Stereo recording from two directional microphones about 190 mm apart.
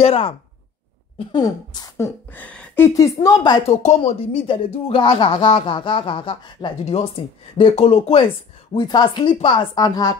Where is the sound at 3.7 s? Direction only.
35° left (ahead or behind).